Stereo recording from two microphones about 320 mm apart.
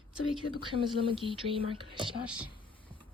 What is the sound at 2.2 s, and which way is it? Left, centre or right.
Speech, centre.